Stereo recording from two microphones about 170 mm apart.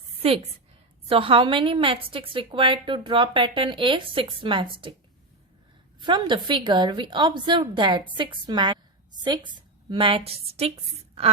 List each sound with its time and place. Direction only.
0.2 s a woman's voice: 35° right (ahead or behind)
6.0 s a woman's voice: 30° right (ahead or behind)